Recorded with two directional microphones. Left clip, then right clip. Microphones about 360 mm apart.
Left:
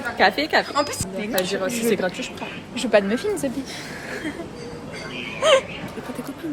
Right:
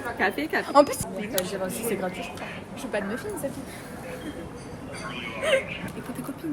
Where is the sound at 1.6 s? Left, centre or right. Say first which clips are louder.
Left 7 dB; left.